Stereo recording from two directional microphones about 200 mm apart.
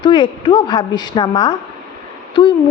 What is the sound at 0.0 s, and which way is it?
A woman's voice, 25° left (ahead or behind).